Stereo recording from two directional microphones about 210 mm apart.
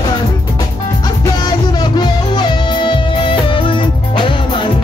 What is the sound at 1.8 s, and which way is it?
Music, 20° left (ahead or behind).